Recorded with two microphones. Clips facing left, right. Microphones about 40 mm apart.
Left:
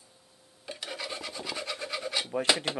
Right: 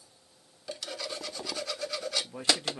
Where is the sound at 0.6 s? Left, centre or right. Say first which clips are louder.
Even; left.